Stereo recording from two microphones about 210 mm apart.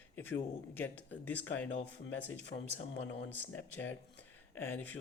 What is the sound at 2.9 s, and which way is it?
Speech, 55° left (ahead or behind).